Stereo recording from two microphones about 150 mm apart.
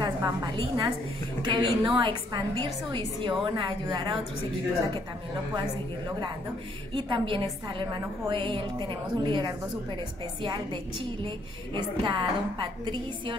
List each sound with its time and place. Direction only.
0.0 s a sound: 25° right (ahead or behind)
0.6 s a woman's voice: 35° right (ahead or behind)
6.9 s a woman's voice: 35° right (ahead or behind)